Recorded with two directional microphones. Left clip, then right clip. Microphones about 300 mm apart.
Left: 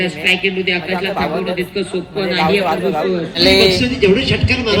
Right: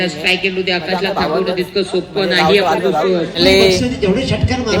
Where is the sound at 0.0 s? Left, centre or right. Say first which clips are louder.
Even; centre.